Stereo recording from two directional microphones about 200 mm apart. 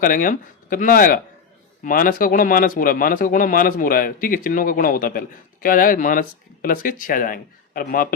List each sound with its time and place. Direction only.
0.0 s a man's voice: 45° left (ahead or behind)